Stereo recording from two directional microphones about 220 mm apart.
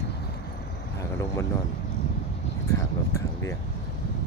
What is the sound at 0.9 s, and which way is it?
Vehicle, 15° left (ahead or behind).